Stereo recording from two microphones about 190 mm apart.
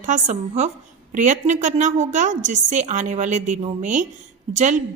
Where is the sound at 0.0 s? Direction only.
40° right (ahead or behind).